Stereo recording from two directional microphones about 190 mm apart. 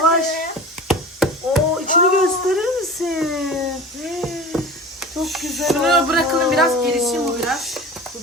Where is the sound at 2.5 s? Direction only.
Centre (ahead or behind).